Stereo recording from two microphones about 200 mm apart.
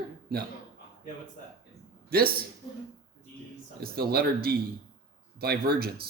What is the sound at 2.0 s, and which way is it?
Speech, 50° right (ahead or behind).